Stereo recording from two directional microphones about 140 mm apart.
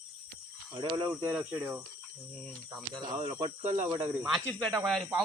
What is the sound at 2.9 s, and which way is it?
Speech, 40° right (ahead or behind).